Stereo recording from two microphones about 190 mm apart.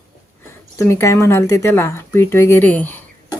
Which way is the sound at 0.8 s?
15° left (ahead or behind).